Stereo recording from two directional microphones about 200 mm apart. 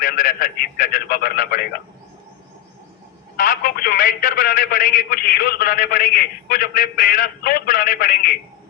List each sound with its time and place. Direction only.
0.0 s speech: 45° left (ahead or behind)
3.3 s speech: 45° left (ahead or behind)